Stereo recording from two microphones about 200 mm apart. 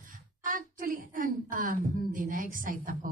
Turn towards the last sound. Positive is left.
turn(degrees=-45)  # may be behind; listen again after turning